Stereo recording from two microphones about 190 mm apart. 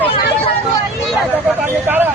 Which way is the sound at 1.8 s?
10° right (ahead or behind).